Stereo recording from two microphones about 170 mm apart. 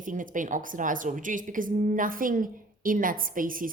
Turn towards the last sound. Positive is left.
turn(degrees=-55)  # may be behind; listen again after turning